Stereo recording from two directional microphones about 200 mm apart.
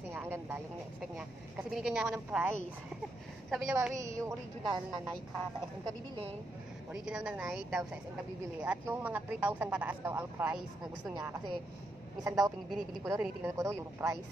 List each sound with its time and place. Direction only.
0.1 s vehicle: 10° right (ahead or behind)
1.1 s a woman's voice: 5° right (ahead or behind)
3.9 s speech: 15° right (ahead or behind)
6.9 s speech: 5° right (ahead or behind)
11.1 s a woman's voice: 20° right (ahead or behind)